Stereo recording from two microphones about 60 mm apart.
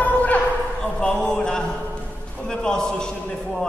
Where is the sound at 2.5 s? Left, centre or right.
Centre.